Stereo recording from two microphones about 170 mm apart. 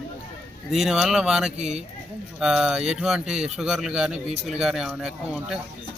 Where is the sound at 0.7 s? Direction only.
Centre (ahead or behind).